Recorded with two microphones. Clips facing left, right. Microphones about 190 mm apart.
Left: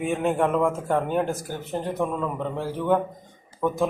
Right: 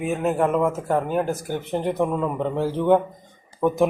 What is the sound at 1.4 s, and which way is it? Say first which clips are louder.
A man's voice: right 4 dB; 20° right (ahead or behind).